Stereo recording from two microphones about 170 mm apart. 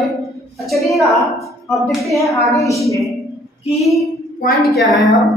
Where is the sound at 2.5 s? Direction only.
20° left (ahead or behind).